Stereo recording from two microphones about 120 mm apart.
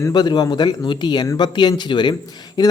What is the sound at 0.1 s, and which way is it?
A man's voice, 35° left (ahead or behind).